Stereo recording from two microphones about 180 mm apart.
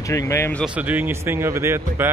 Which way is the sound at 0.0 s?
15° left (ahead or behind).